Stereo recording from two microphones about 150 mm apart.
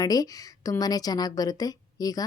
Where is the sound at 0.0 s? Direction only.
25° left (ahead or behind).